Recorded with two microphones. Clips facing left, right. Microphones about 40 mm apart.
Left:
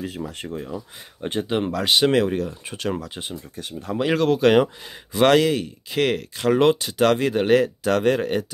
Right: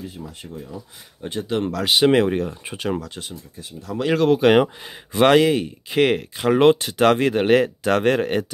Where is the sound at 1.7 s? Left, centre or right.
Centre.